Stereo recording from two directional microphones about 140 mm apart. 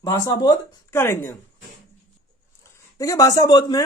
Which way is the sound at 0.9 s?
20° left (ahead or behind).